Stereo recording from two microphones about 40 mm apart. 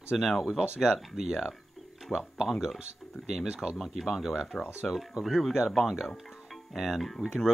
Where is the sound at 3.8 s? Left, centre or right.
Centre.